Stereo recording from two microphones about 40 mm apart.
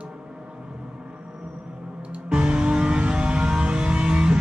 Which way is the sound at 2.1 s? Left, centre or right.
Right.